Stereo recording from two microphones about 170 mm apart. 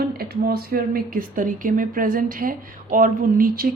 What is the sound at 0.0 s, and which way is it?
Speech, 65° right (ahead or behind).